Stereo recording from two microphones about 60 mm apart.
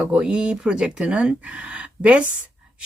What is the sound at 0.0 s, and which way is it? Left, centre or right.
Speech, centre.